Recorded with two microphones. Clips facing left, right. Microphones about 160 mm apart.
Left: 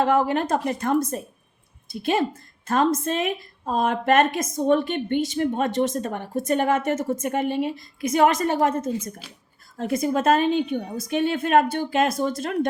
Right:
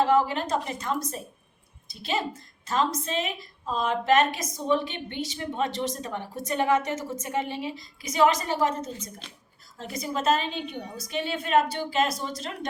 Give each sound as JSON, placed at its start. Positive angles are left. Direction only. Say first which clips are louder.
{"t": 0.0, "sound": "a woman's voice", "louder": "left 2 dB", "side_deg": 55}